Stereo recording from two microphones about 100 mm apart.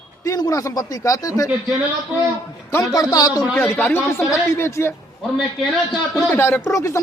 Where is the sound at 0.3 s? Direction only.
40° left (ahead or behind).